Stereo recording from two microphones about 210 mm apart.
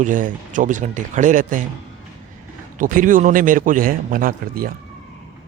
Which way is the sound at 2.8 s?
40° right (ahead or behind).